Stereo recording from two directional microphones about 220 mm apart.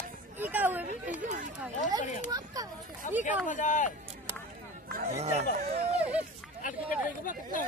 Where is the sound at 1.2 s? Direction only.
35° right (ahead or behind).